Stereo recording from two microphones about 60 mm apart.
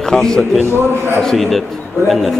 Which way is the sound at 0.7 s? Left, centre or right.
Right.